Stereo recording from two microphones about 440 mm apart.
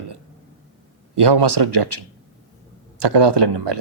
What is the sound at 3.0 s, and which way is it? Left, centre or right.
Speech, right.